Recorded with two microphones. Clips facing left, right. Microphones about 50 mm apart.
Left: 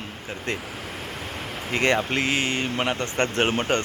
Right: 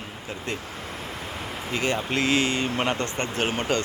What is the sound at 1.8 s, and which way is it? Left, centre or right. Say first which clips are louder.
Speech: left 5 dB; left.